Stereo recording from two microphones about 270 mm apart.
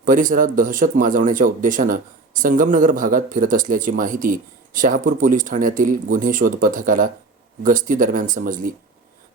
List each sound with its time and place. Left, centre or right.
0.0 s speech: right